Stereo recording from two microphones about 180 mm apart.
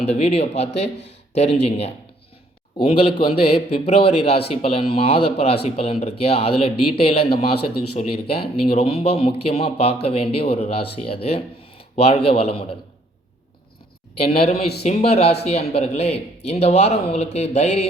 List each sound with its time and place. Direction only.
0.0 s speech: 35° left (ahead or behind)
0.9 s a sound: 75° left (ahead or behind)
1.6 s speech: 35° left (ahead or behind)
14.2 s speech: 35° left (ahead or behind)
14.5 s speech: 65° left (ahead or behind)
14.8 s speech: 35° left (ahead or behind)